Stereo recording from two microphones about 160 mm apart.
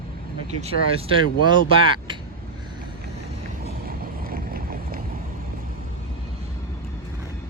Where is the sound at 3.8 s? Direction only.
65° right (ahead or behind).